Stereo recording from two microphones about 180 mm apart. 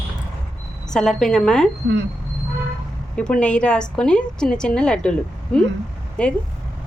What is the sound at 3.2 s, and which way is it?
A woman's voice, 5° left (ahead or behind).